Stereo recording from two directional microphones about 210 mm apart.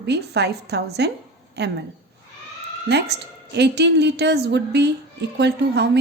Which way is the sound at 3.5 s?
55° right (ahead or behind).